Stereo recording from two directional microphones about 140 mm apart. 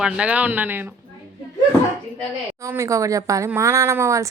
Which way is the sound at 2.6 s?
20° right (ahead or behind).